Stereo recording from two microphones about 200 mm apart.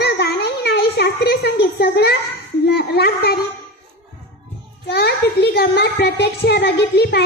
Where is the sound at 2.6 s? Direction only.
55° left (ahead or behind).